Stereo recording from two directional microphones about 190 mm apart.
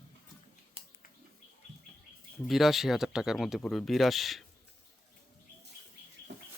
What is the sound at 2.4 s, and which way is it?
Speech, centre (ahead or behind).